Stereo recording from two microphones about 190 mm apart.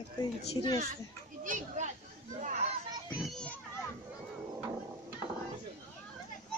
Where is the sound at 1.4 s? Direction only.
40° right (ahead or behind).